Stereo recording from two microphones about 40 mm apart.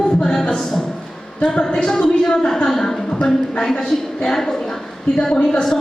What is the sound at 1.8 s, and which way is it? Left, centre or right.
A man's voice, centre.